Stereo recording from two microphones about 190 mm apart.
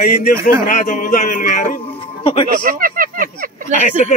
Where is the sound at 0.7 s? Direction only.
45° left (ahead or behind).